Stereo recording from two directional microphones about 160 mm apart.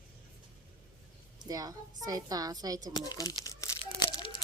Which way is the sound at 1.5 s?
25° right (ahead or behind).